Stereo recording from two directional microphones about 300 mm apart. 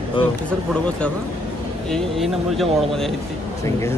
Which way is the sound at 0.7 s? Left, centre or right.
Centre.